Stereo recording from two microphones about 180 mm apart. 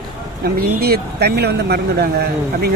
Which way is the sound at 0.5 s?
60° right (ahead or behind).